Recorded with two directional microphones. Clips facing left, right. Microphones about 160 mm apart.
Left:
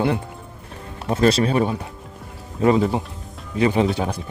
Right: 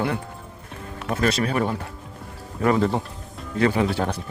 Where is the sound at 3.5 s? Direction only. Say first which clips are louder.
Left 2 dB; 20° left (ahead or behind).